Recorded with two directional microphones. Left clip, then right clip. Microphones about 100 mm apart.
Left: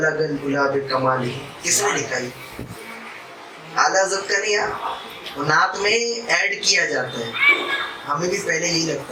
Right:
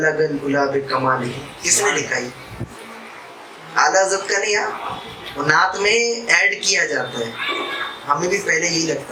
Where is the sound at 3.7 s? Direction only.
15° right (ahead or behind).